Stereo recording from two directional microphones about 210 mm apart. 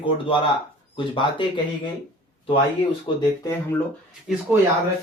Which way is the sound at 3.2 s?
15° left (ahead or behind).